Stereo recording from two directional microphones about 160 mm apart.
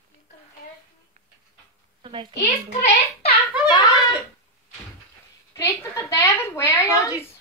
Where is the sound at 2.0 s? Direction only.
35° right (ahead or behind).